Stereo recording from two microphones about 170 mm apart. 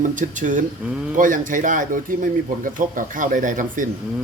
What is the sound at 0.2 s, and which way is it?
A man's voice, 50° right (ahead or behind).